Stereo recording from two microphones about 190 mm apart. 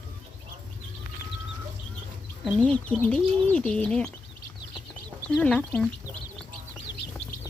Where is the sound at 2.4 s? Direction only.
5° left (ahead or behind).